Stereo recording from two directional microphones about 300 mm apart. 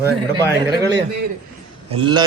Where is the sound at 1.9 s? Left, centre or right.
Centre.